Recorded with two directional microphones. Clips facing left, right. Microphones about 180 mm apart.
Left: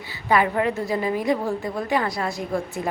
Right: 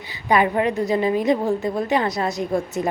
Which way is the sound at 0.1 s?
20° right (ahead or behind).